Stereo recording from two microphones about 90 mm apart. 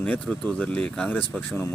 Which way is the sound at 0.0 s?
10° left (ahead or behind).